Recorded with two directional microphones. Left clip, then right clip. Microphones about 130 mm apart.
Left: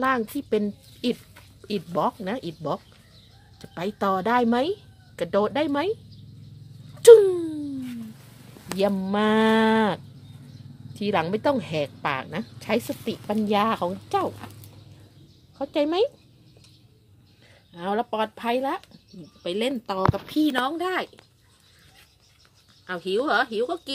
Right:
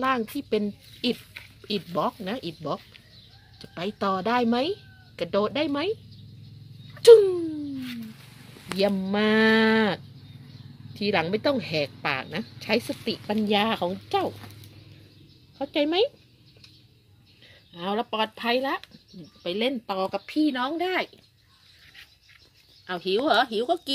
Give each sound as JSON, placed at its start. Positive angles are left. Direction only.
{"t": 0.0, "sound": "speech", "side_deg": 5}
{"t": 7.0, "sound": "a sound", "side_deg": 0}
{"t": 8.7, "sound": "speech", "side_deg": -5}
{"t": 15.5, "sound": "speech", "side_deg": 0}
{"t": 17.7, "sound": "speech", "side_deg": -5}
{"t": 22.8, "sound": "a woman's voice", "side_deg": -20}